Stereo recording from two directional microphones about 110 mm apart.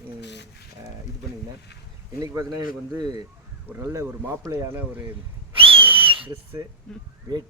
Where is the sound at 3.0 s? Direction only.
40° right (ahead or behind).